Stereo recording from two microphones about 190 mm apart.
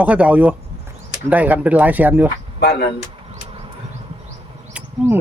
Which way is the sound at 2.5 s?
60° left (ahead or behind).